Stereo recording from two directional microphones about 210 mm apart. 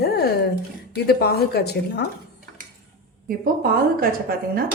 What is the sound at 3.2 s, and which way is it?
Speech, 45° right (ahead or behind).